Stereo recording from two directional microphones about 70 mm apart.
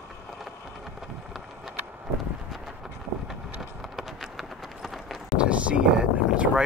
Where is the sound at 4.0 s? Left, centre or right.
Centre.